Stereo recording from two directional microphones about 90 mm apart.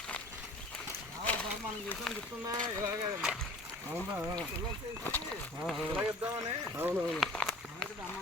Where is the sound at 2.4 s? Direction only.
35° right (ahead or behind).